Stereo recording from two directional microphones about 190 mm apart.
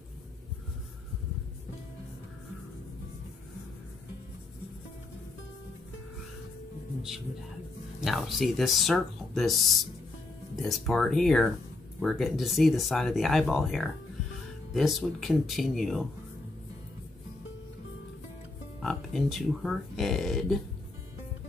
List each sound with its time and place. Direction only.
8.0 s speech: centre (ahead or behind)
18.8 s speech: centre (ahead or behind)